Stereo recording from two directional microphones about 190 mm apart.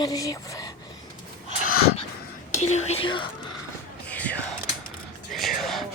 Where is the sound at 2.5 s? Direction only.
35° left (ahead or behind).